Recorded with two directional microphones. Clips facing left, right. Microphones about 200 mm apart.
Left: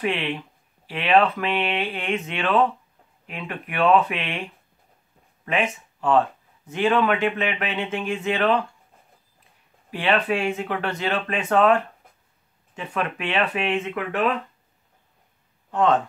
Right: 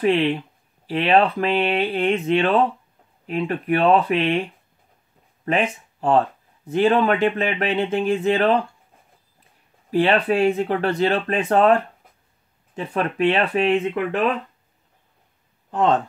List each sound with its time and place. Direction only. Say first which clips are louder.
0.0 s speech: right 7 dB; 35° right (ahead or behind)
5.4 s speech: right 3 dB; 35° right (ahead or behind)
9.8 s speech: right 4 dB; 40° right (ahead or behind)